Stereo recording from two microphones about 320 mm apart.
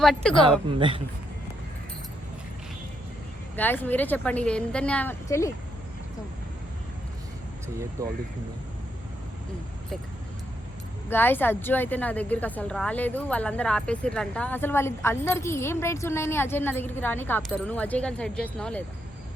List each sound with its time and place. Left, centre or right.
0.0 s a woman's voice: centre
0.7 s a man's voice: centre
3.5 s a woman's voice: centre
8.0 s a man's voice: centre
11.1 s a woman's voice: centre